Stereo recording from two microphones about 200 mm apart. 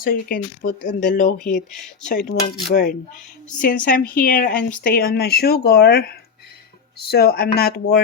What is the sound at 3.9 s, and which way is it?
Speech, 45° left (ahead or behind).